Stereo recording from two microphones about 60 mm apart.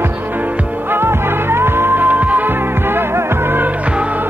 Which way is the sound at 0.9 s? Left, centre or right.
Right.